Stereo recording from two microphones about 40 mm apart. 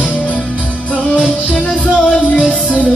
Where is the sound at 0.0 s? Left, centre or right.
Left.